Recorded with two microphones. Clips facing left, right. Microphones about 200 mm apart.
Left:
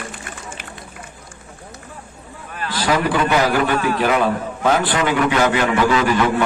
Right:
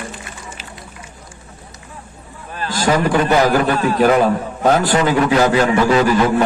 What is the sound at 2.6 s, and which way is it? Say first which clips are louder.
A man's voice: right 3 dB; 45° right (ahead or behind).